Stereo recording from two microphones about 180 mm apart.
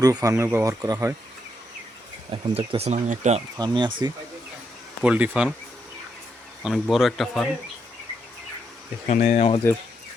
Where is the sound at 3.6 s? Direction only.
25° right (ahead or behind).